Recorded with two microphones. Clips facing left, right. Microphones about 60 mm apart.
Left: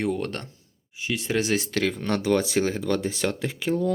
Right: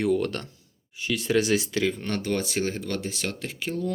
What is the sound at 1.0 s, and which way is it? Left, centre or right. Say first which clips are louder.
Speech: right 2 dB; left.